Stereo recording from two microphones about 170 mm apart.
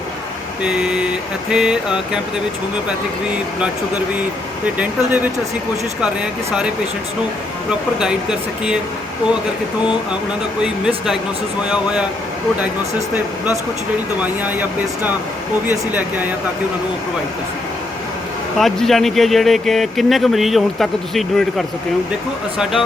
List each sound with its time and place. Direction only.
0.6 s speech: 5° right (ahead or behind)
4.6 s speech: 10° right (ahead or behind)
7.7 s speech: 5° right (ahead or behind)
10.6 s speech: 5° right (ahead or behind)
14.2 s speech: 10° right (ahead or behind)
18.6 s speech: centre (ahead or behind)